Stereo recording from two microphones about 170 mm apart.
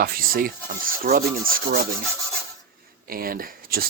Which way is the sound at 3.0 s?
60° right (ahead or behind).